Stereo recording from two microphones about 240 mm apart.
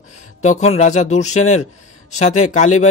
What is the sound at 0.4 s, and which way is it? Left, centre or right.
Speech, left.